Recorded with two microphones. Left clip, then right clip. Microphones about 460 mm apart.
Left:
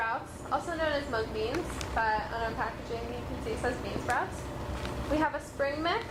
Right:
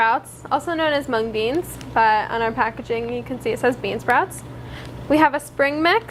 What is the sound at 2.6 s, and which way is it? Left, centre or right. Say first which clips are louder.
Speech: right 15 dB; right.